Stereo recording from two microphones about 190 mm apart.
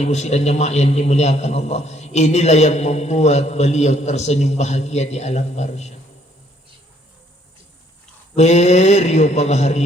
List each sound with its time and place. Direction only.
0.0 s a man's voice: 35° left (ahead or behind)
8.4 s a man's voice: 35° left (ahead or behind)